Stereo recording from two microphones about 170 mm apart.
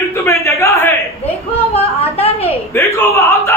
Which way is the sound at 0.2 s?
15° left (ahead or behind).